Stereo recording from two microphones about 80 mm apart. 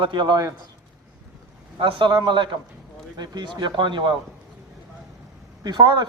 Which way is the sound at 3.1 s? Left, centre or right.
Right.